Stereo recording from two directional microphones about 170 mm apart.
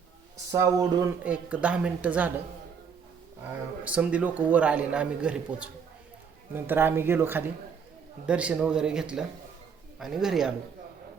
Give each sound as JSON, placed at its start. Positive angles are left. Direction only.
{"t": 0.5, "sound": "a man's voice", "side_deg": -20}
{"t": 1.2, "sound": "a man's voice", "side_deg": -10}
{"t": 3.8, "sound": "a man's voice", "side_deg": -5}